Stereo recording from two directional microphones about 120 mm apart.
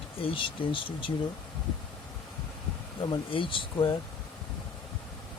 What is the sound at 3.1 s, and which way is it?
Speech, 45° left (ahead or behind).